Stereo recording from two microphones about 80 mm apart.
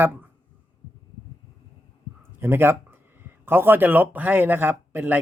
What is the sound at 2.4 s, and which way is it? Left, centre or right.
Speech, right.